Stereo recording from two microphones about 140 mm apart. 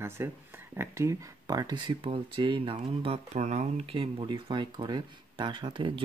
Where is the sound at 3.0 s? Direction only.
50° right (ahead or behind).